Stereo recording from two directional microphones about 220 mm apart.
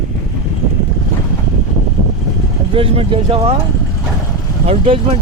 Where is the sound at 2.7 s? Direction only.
25° right (ahead or behind).